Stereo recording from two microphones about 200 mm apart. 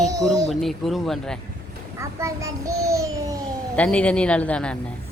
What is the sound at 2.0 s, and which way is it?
Child singing, 15° right (ahead or behind).